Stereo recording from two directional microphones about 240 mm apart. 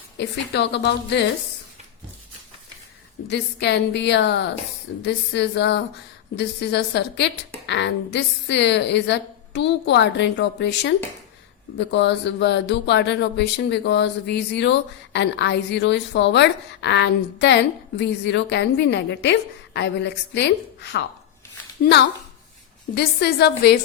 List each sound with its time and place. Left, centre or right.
0.2 s speech: left
3.2 s speech: left
23.0 s a woman's voice: left